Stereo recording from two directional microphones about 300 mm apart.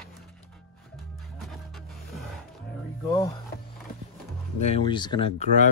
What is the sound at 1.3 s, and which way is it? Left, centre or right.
Music, centre.